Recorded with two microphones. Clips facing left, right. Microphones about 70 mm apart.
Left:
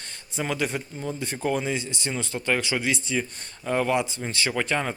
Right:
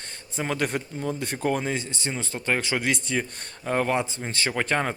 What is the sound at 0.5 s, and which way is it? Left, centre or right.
Speech, right.